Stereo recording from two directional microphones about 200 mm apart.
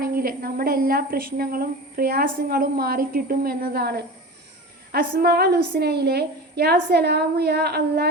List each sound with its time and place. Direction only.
0.0 s a woman's voice: 50° right (ahead or behind)